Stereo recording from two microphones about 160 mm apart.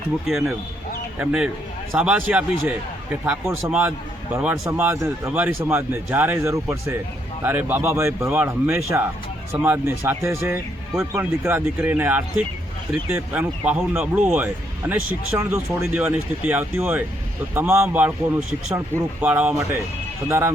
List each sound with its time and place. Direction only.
0.3 s a man's voice: centre (ahead or behind); by 20.5 s 15° right (ahead or behind)